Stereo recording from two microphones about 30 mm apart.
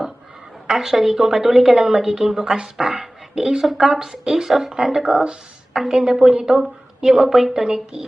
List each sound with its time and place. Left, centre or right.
0.7 s a woman's voice: centre